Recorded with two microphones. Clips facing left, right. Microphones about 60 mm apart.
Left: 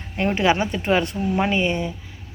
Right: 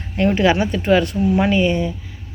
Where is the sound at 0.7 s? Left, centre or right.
Centre.